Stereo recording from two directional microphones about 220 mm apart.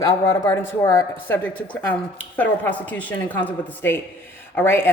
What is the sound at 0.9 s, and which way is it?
Speech, 10° left (ahead or behind).